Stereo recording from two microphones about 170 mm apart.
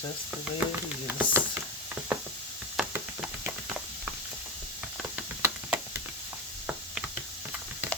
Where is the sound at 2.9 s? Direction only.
10° right (ahead or behind).